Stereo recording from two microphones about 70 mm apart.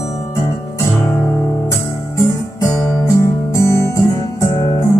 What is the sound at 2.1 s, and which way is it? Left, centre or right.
Music, left.